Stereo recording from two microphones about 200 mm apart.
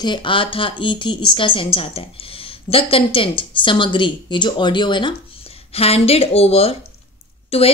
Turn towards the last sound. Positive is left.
turn(degrees=30)  # may be behind; listen again after turning